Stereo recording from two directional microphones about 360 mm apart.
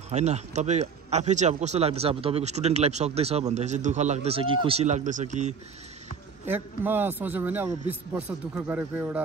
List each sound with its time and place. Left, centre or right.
0.1 s speech: centre
6.4 s a man's voice: centre